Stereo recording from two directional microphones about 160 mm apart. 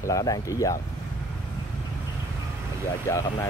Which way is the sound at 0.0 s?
20° left (ahead or behind).